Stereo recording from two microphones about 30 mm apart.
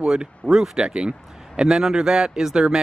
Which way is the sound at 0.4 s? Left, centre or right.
Left.